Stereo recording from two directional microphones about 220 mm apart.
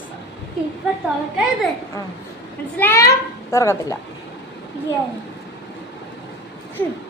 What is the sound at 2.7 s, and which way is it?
A woman's voice, 10° left (ahead or behind).